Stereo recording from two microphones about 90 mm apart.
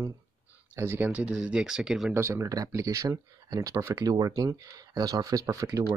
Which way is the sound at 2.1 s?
30° right (ahead or behind).